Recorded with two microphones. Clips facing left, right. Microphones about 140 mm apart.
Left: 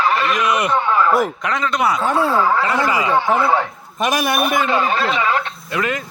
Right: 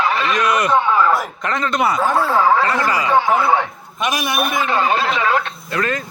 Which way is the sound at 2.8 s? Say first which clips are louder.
Left 1 dB; 25° left (ahead or behind).